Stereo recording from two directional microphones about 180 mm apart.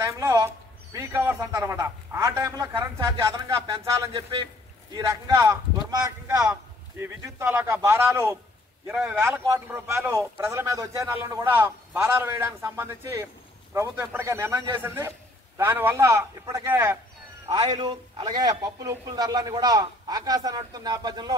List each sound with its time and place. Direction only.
0.0 s a sound: 15° right (ahead or behind)
0.9 s speech: 15° right (ahead or behind)
4.1 s a man's voice: 30° right (ahead or behind)
7.0 s a man's voice: 15° right (ahead or behind)